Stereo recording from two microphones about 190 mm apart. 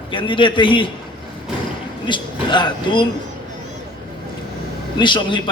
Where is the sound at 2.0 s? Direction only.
25° left (ahead or behind).